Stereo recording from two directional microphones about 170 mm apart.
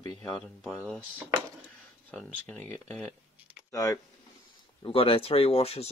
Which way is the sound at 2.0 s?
5° left (ahead or behind).